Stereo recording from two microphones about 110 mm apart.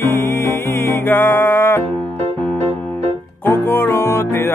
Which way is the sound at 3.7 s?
20° left (ahead or behind).